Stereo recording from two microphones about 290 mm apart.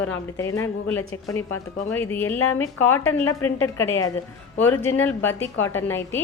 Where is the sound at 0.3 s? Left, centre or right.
Centre.